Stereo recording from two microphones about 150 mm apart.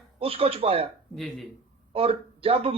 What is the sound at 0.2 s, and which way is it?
Speech, 40° right (ahead or behind).